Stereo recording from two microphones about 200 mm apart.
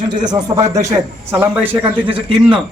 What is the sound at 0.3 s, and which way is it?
Speech, 20° right (ahead or behind).